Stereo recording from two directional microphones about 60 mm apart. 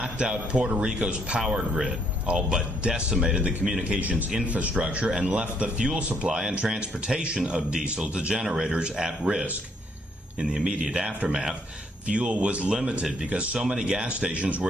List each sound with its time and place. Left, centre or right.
0.0 s speech: centre
10.5 s speech: centre